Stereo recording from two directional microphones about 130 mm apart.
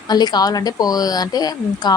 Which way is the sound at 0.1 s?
30° left (ahead or behind).